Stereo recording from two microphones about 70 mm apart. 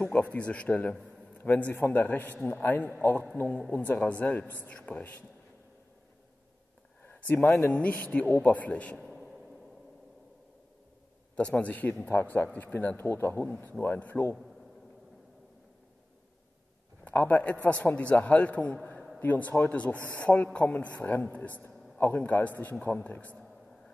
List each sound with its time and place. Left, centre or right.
0.0 s a man's voice: left
7.0 s a sound: left
7.4 s speech: left
7.7 s a man's voice: left
8.9 s a sound: centre
11.3 s a man's voice: centre
14.3 s a man's voice: centre
17.0 s a man's voice: left